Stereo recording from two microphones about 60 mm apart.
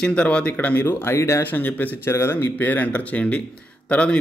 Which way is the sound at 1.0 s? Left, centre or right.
Left.